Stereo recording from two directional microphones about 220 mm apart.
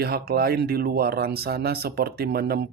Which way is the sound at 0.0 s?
45° right (ahead or behind).